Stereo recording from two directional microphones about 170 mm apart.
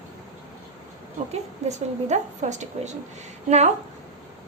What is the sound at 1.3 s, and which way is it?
A woman's voice, 40° right (ahead or behind).